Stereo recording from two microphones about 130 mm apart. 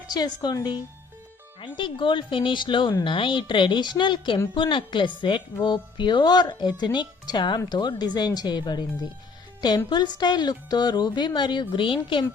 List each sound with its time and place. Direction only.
0.1 s speech: 30° left (ahead or behind)